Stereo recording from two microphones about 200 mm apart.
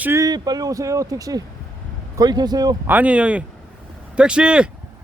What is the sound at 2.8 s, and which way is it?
Speech, 5° right (ahead or behind).